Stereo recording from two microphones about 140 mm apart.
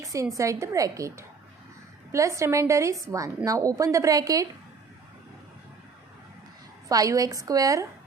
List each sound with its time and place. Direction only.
0.0 s a woman's voice: 25° right (ahead or behind)
6.8 s a woman's voice: 25° right (ahead or behind)